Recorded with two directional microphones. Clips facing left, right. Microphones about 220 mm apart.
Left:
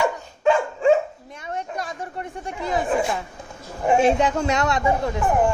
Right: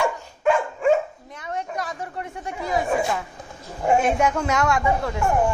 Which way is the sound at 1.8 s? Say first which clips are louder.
Even; 30° left (ahead or behind).